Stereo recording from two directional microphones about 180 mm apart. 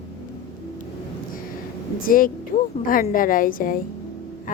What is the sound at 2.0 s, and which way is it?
A woman's voice, 50° left (ahead or behind).